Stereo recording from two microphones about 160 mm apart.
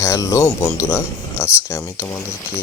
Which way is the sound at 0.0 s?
20° left (ahead or behind).